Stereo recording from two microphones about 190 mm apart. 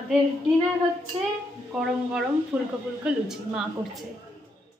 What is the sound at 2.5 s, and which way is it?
A woman's voice, 10° right (ahead or behind).